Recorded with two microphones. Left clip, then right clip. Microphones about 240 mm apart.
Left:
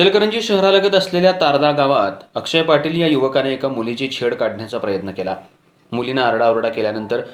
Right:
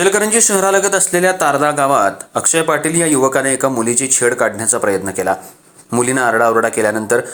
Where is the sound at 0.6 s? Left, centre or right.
Right.